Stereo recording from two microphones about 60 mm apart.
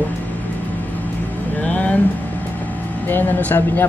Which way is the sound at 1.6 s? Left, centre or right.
Left.